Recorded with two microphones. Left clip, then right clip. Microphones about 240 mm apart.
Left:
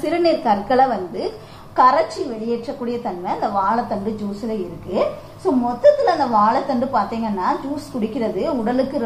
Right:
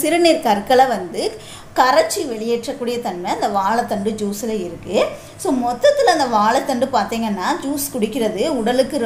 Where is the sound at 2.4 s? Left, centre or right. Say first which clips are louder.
Right 4 dB; right.